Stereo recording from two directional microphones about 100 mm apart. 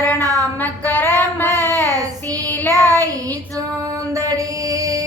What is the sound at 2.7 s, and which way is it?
Child singing, 35° right (ahead or behind).